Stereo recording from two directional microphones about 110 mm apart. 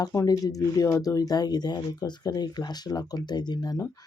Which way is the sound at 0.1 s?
30° left (ahead or behind).